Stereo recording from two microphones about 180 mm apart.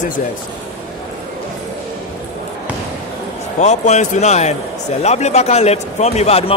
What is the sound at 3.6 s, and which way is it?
Speech, 40° left (ahead or behind).